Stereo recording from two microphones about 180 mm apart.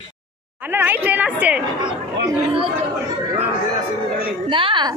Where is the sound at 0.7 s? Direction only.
10° right (ahead or behind).